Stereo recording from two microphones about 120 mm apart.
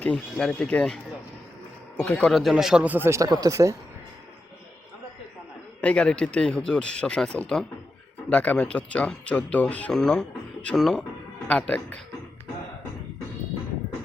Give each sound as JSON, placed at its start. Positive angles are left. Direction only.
{"t": 0.0, "sound": "speech", "side_deg": 10}
{"t": 2.0, "sound": "speech", "side_deg": 10}
{"t": 5.8, "sound": "speech", "side_deg": 10}